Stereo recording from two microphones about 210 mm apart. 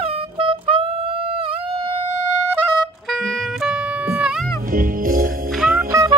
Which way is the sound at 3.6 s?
5° right (ahead or behind).